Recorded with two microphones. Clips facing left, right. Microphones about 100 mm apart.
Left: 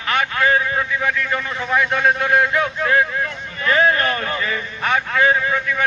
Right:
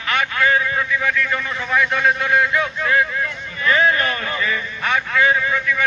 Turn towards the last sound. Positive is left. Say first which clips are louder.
# even
turn(degrees=35)  # may be behind; listen again after turning